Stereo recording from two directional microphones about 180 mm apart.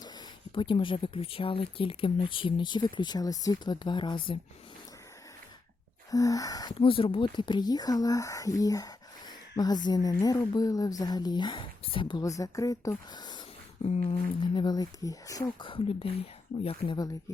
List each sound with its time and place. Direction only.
0.5 s speech: 30° left (ahead or behind)
6.1 s speech: 20° left (ahead or behind)
14.0 s speech: 30° left (ahead or behind)